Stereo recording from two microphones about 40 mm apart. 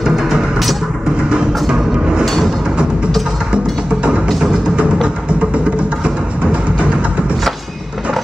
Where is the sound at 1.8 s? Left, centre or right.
Centre.